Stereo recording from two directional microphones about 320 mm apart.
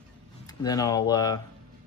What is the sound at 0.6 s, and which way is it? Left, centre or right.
Speech, centre.